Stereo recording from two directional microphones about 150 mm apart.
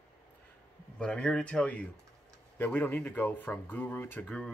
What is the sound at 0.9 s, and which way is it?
Speech, 5° left (ahead or behind).